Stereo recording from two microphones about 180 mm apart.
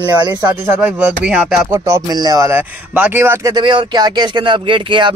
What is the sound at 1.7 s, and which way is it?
Speech, 15° right (ahead or behind).